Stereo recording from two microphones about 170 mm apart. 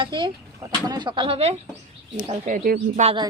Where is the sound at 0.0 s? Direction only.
30° right (ahead or behind).